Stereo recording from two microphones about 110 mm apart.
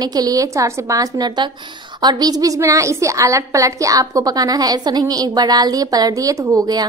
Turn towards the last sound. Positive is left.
turn(degrees=-35)  # may be behind; listen again after turning